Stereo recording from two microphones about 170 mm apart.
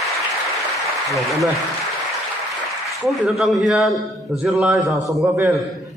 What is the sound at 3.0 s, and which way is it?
A man's voice, centre (ahead or behind).